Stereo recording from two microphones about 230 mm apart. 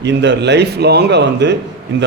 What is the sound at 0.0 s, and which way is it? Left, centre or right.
A man's voice, right.